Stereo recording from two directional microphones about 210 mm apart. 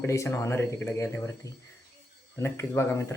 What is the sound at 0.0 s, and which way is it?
Speech, 15° left (ahead or behind).